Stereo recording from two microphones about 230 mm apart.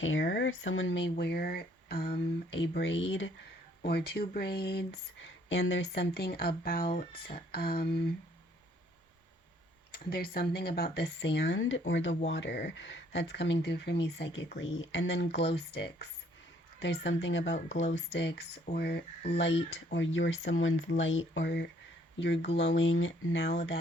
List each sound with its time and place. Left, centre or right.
0.0 s speech: left
9.9 s speech: left